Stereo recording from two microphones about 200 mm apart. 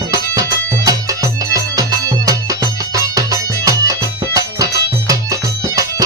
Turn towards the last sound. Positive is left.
turn(degrees=-15)  # may be behind; listen again after turning